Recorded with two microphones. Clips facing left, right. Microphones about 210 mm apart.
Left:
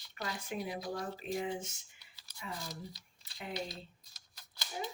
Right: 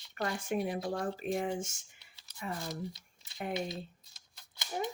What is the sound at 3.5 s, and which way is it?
Speech, 25° right (ahead or behind).